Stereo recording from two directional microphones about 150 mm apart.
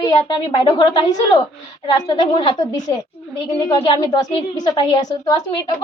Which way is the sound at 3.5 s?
30° left (ahead or behind).